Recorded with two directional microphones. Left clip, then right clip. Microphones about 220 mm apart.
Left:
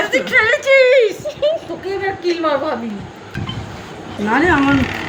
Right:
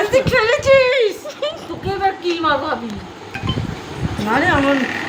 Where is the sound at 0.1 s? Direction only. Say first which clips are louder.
Left 2 dB; 15° right (ahead or behind).